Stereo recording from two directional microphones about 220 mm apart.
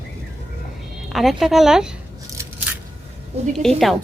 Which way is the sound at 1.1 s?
Centre (ahead or behind).